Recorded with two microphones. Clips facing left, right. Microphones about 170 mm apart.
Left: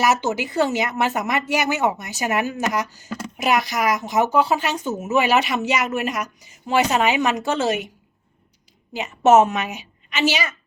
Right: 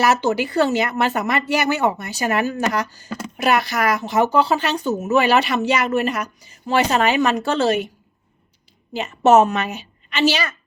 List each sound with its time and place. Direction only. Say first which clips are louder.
0.0 s a woman's voice: right 2 dB; 15° left (ahead or behind)
4.3 s speech: right 1 dB; 5° left (ahead or behind)
4.6 s a woman's voice: right 3 dB; 15° left (ahead or behind)
8.9 s a woman's voice: right 1 dB; 15° left (ahead or behind)